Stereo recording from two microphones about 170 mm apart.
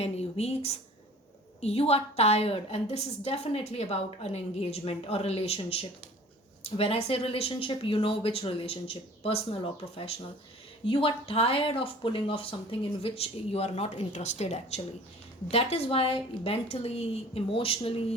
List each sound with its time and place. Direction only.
0.0 s a woman's voice: 35° left (ahead or behind)